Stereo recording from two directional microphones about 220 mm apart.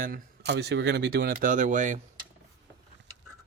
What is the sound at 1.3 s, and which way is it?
Speech, 35° right (ahead or behind).